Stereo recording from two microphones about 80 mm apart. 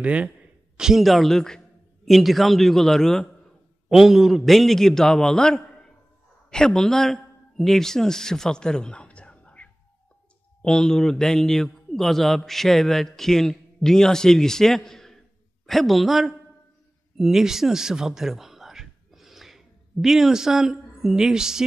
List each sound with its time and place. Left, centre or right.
0.0 s speech: centre
0.7 s a man's voice: centre